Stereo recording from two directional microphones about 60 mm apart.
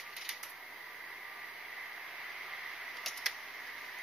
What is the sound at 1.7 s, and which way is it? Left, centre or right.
Vehicle, centre.